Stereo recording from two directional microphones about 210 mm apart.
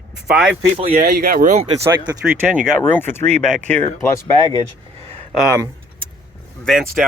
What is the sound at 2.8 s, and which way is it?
Speech, 10° left (ahead or behind).